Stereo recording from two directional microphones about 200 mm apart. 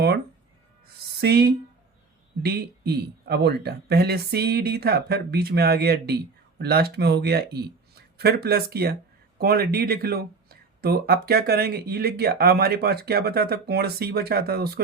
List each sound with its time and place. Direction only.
1.2 s speech: 55° right (ahead or behind)